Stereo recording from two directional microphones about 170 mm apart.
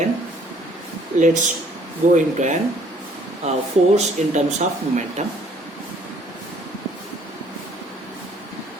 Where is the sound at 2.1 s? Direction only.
45° right (ahead or behind).